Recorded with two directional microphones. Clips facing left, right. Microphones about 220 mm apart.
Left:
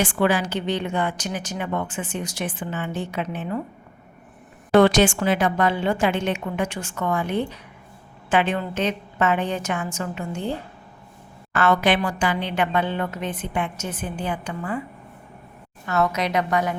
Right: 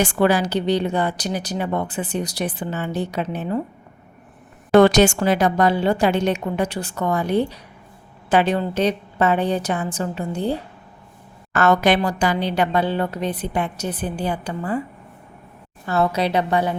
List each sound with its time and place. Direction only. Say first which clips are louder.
0.0 s a woman's voice: right 3 dB; 40° right (ahead or behind)
4.7 s a woman's voice: right 3 dB; 40° right (ahead or behind)
11.5 s a woman's voice: right 3 dB; 40° right (ahead or behind)
15.9 s a woman's voice: right 3 dB; 30° right (ahead or behind)